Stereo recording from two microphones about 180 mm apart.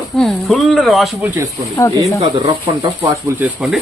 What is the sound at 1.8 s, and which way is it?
Speech, 15° left (ahead or behind).